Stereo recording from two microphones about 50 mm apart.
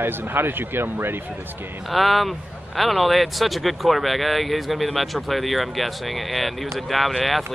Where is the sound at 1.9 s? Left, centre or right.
Centre.